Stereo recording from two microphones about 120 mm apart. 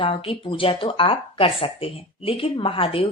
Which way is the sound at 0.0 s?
50° left (ahead or behind).